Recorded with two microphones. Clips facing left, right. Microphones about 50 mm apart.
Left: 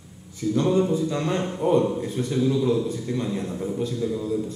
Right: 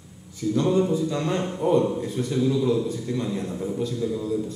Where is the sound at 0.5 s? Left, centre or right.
Left.